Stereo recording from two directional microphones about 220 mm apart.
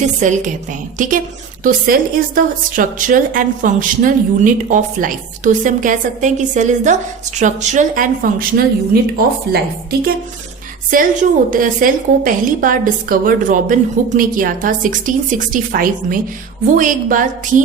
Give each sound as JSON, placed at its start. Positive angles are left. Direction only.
{"t": 0.2, "sound": "a woman's voice", "side_deg": -35}
{"t": 10.9, "sound": "a woman's voice", "side_deg": -40}